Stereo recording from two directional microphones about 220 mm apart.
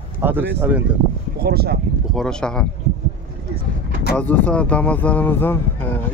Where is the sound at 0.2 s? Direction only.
10° right (ahead or behind).